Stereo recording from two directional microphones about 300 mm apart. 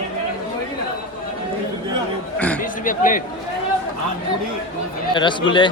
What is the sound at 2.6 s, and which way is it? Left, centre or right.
Speech, left.